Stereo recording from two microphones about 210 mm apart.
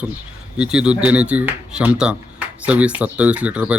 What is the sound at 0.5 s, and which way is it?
Speech, 5° right (ahead or behind).